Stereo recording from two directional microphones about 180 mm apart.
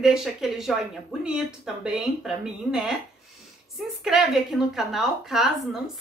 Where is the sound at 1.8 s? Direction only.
5° right (ahead or behind).